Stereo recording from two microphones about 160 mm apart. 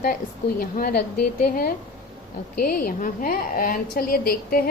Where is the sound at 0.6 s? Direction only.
65° left (ahead or behind).